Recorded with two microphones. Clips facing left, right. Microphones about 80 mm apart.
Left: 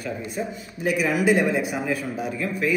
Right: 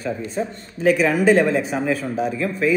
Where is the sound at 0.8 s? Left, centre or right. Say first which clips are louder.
Right 6 dB; centre.